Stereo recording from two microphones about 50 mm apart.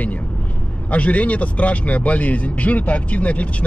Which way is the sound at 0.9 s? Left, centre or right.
Left.